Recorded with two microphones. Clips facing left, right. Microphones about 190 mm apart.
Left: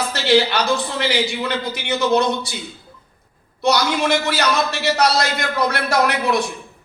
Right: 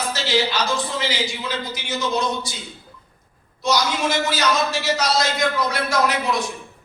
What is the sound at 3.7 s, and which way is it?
A man's voice, 65° left (ahead or behind).